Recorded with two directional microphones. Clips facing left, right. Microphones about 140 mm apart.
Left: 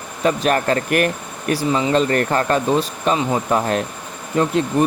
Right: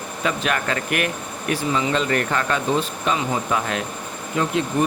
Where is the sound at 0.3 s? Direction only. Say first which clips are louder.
Left 6 dB; 40° left (ahead or behind).